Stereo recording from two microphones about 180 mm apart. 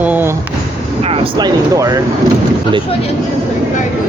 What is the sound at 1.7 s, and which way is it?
Speech, 20° right (ahead or behind).